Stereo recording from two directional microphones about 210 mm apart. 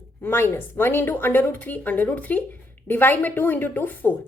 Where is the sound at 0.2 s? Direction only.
10° left (ahead or behind).